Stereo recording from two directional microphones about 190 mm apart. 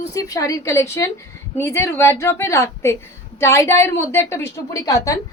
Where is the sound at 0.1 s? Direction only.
15° left (ahead or behind).